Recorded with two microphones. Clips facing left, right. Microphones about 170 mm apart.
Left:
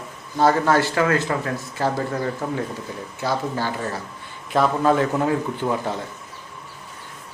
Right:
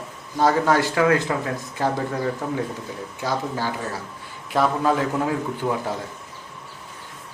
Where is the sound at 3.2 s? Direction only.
10° right (ahead or behind).